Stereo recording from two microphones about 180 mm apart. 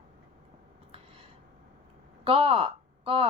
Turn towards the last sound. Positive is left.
turn(degrees=-30)  # may be behind; listen again after turning